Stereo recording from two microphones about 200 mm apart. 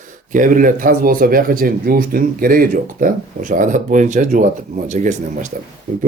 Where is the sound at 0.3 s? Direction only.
40° right (ahead or behind).